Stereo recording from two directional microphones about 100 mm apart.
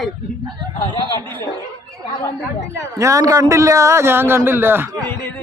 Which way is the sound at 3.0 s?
35° right (ahead or behind).